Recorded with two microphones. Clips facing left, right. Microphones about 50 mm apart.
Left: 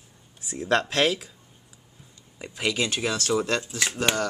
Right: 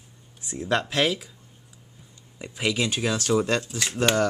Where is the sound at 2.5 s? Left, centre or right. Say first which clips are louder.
Right 1 dB; centre.